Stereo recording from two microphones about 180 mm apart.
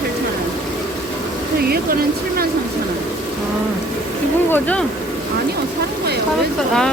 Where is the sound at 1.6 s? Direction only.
55° right (ahead or behind).